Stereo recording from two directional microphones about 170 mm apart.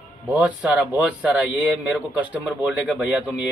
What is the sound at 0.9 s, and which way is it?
Speech, 10° right (ahead or behind).